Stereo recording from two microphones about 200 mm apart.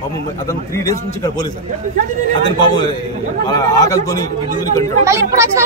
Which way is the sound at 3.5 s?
20° left (ahead or behind).